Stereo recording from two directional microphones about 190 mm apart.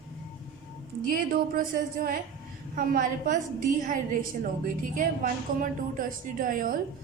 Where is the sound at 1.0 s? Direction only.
50° right (ahead or behind).